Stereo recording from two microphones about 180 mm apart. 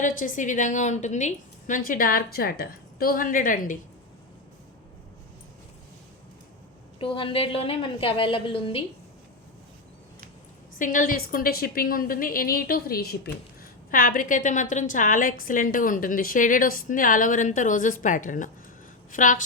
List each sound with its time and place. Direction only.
0.0 s a woman's voice: 50° left (ahead or behind)
7.0 s a woman's voice: 30° left (ahead or behind)
10.8 s a woman's voice: 45° left (ahead or behind)